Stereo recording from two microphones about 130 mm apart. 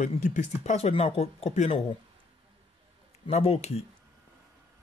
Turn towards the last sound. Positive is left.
turn(degrees=50)  # may be behind; listen again after turning